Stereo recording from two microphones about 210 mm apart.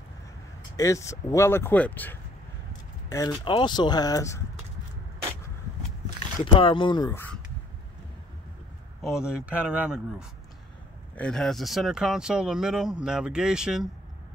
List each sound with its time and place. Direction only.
0.7 s speech: 15° left (ahead or behind)
6.4 s speech: 25° left (ahead or behind)
9.0 s speech: 5° right (ahead or behind)